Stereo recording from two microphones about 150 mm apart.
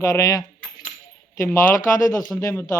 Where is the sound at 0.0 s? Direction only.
20° left (ahead or behind).